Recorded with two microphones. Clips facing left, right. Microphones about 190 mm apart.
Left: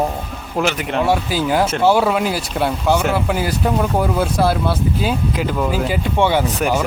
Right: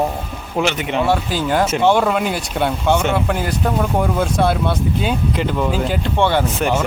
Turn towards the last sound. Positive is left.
turn(degrees=0)  # may be behind; listen again after turning